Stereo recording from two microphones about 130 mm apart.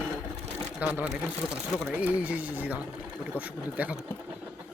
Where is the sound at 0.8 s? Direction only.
10° right (ahead or behind).